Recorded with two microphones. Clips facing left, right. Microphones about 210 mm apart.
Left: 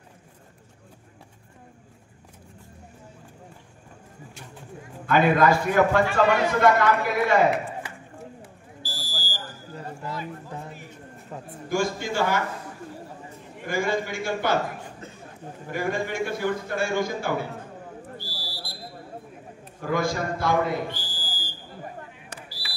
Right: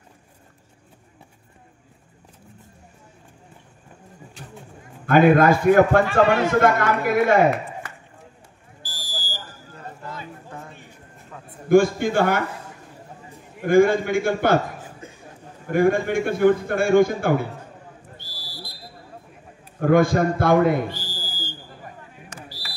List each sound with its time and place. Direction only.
5.0 s a man's voice: 50° right (ahead or behind)
8.8 s fire alarm: 15° right (ahead or behind)
11.3 s a sound: 30° left (ahead or behind)
11.7 s a man's voice: 55° right (ahead or behind)
13.7 s a man's voice: 55° right (ahead or behind)
14.8 s chuckle: 10° right (ahead or behind)
15.7 s a man's voice: 55° right (ahead or behind)
18.1 s a sound: 20° right (ahead or behind)
19.8 s a man's voice: 55° right (ahead or behind)
20.9 s a sound: 25° right (ahead or behind)